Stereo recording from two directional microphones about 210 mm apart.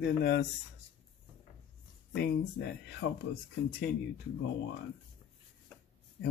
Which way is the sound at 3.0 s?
65° left (ahead or behind).